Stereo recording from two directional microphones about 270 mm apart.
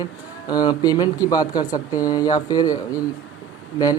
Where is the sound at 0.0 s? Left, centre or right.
Centre.